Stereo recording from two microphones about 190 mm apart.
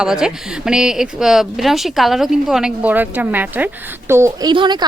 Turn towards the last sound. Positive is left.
turn(degrees=-25)  # may be behind; listen again after turning